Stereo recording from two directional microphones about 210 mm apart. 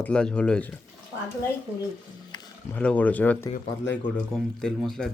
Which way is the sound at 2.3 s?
20° left (ahead or behind).